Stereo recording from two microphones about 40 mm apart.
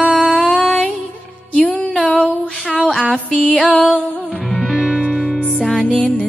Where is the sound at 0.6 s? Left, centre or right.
Left.